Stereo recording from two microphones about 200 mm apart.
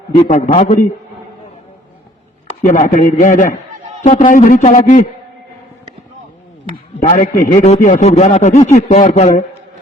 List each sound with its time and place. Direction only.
0.2 s a man's voice: 35° left (ahead or behind)
2.6 s a man's voice: 40° left (ahead or behind)
7.0 s a man's voice: 35° left (ahead or behind)